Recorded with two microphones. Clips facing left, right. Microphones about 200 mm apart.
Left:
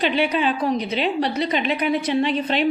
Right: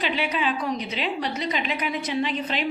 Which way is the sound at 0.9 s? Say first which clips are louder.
Left 6 dB; 60° left (ahead or behind).